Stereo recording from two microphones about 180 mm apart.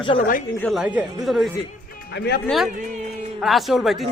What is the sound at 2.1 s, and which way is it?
Speech, 65° left (ahead or behind).